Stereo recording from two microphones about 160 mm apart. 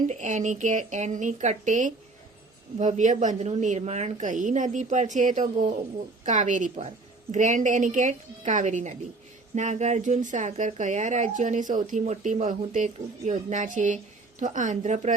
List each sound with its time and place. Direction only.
0.1 s speech: 50° right (ahead or behind)